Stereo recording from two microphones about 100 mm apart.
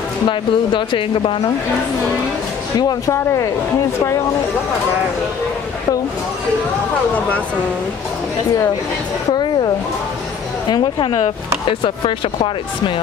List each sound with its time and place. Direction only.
0.3 s speech: 55° left (ahead or behind)
10.7 s a woman's voice: 50° left (ahead or behind)